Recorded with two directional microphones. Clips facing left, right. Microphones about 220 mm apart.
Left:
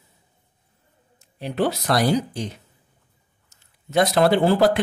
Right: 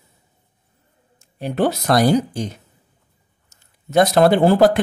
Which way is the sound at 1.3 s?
45° right (ahead or behind).